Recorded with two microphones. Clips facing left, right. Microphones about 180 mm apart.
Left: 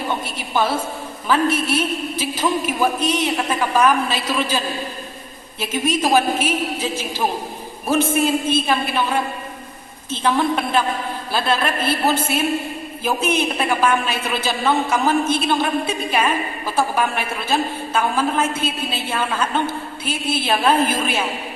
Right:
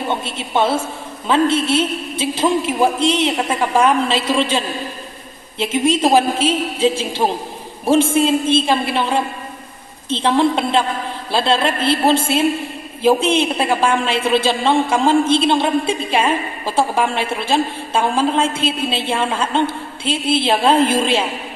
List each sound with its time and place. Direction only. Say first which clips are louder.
0.1 s a man's voice: right 3 dB; 25° right (ahead or behind)